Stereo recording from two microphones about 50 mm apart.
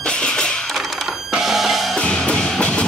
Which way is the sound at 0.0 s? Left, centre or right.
Centre.